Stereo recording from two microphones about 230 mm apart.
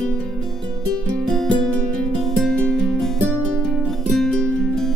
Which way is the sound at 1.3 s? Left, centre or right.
Centre.